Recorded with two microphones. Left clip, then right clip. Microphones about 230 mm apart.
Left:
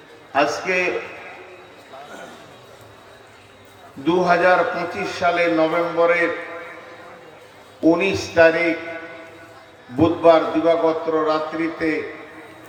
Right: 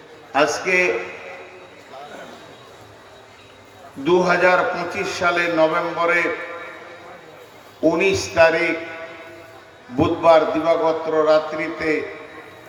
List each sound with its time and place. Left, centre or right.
0.3 s a man's voice: right
4.0 s a man's voice: right
7.9 s a man's voice: right
10.0 s a man's voice: right